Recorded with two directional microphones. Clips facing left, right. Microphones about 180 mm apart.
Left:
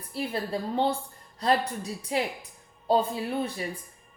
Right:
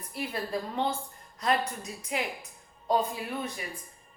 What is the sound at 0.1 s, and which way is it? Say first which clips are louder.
Speech: left 3 dB; 30° left (ahead or behind).